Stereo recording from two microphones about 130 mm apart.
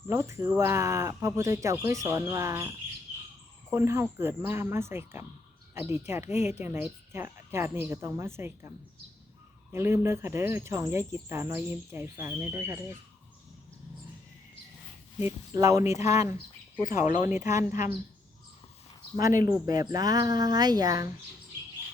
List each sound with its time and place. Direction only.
0.1 s speech: 20° right (ahead or behind)
9.7 s speech: 20° right (ahead or behind)
15.5 s speech: 25° right (ahead or behind)
16.8 s speech: 85° left
19.1 s speech: 25° right (ahead or behind)